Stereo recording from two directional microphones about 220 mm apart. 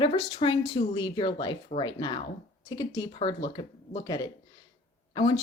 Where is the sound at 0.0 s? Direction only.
25° left (ahead or behind).